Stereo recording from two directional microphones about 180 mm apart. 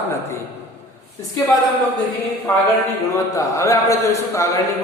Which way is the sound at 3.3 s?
15° left (ahead or behind).